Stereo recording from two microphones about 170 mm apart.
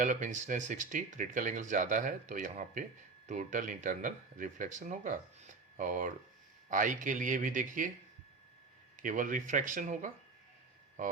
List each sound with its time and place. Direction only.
0.0 s speech: 50° right (ahead or behind)
9.0 s speech: 50° right (ahead or behind)